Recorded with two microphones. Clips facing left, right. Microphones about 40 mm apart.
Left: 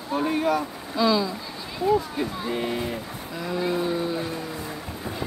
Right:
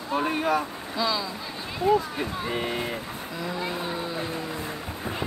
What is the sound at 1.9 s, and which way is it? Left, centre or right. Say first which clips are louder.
Speech: left 1 dB; right.